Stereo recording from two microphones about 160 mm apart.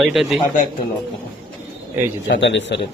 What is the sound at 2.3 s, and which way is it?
Speech, 90° left.